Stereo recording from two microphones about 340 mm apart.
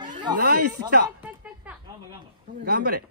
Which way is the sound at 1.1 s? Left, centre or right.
Centre.